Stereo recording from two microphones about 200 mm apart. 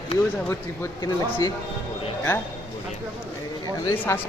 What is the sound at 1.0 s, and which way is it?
Speech, 20° left (ahead or behind).